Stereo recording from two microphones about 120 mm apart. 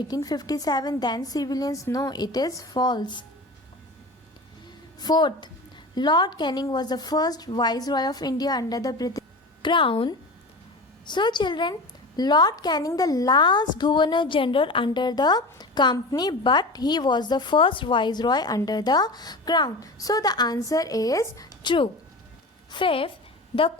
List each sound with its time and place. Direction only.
0.1 s a woman's voice: 35° left (ahead or behind)
4.9 s a woman's voice: 35° left (ahead or behind)
9.6 s a woman's voice: 45° left (ahead or behind)
14.8 s a woman's voice: 35° left (ahead or behind)